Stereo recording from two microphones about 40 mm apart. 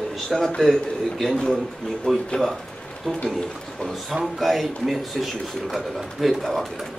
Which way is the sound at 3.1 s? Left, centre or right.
Centre.